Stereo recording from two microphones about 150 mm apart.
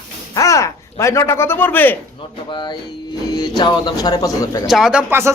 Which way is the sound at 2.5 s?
30° left (ahead or behind).